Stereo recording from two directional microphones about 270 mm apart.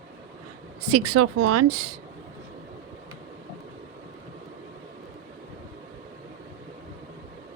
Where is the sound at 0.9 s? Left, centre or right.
Right.